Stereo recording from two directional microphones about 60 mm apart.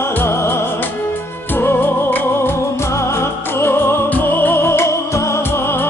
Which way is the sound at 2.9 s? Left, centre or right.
Left.